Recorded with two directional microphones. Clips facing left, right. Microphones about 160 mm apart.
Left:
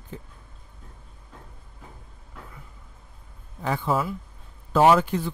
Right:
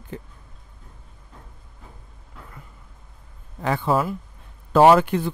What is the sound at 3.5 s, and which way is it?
Speech, 65° right (ahead or behind).